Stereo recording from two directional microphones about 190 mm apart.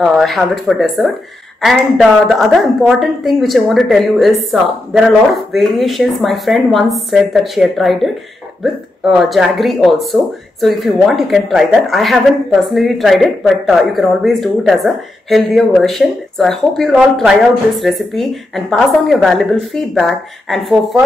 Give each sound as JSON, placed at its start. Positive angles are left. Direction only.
{"t": 0.0, "sound": "a woman's voice", "side_deg": 0}